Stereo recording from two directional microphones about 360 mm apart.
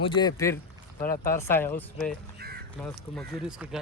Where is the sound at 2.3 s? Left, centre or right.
Right.